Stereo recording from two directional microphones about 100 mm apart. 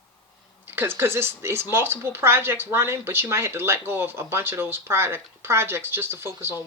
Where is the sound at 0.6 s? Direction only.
20° right (ahead or behind).